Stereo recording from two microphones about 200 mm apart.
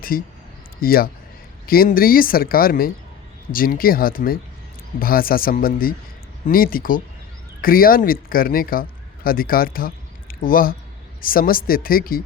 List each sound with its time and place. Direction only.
0.1 s speech: 45° left (ahead or behind)